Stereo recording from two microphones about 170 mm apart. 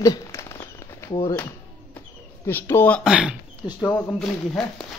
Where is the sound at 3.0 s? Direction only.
5° right (ahead or behind).